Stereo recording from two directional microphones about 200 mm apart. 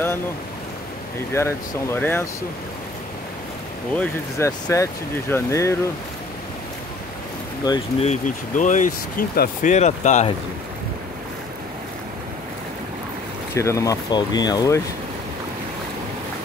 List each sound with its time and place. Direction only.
1.3 s speech: 10° left (ahead or behind)
3.9 s speech: 5° left (ahead or behind)
4.5 s speech: 20° left (ahead or behind)
8.0 s speech: 35° left (ahead or behind)
13.6 s speech: 15° left (ahead or behind)